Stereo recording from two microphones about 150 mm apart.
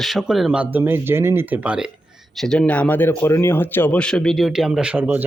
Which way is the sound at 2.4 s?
5° left (ahead or behind).